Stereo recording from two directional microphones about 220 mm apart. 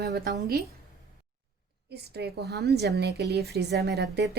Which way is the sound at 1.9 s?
50° right (ahead or behind).